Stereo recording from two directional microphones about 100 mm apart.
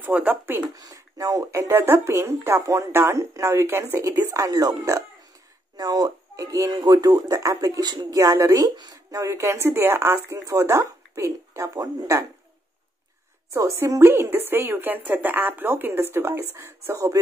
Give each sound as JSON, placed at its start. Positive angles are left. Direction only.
{"t": 0.0, "sound": "speech", "side_deg": -15}
{"t": 0.7, "sound": "speech", "side_deg": -35}
{"t": 1.6, "sound": "a woman's voice", "side_deg": -25}
{"t": 13.5, "sound": "a woman's voice", "side_deg": -30}